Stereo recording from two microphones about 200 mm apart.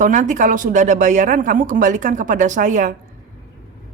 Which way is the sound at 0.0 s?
40° right (ahead or behind).